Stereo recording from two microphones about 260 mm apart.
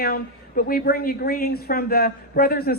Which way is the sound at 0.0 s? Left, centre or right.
Left.